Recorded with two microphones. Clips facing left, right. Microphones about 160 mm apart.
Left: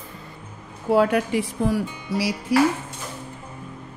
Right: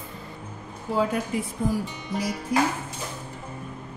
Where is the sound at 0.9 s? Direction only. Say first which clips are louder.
Left 6 dB; 70° left (ahead or behind).